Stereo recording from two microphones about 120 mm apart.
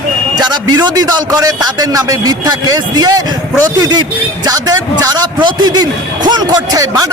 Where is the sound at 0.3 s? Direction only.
35° right (ahead or behind).